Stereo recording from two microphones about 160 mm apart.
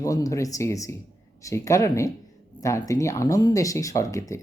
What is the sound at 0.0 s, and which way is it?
Speech, 20° left (ahead or behind).